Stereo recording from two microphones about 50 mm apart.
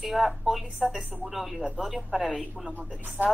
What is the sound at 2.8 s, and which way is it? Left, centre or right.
Speech, right.